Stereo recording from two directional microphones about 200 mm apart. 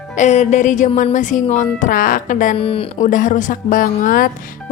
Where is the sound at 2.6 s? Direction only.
30° left (ahead or behind).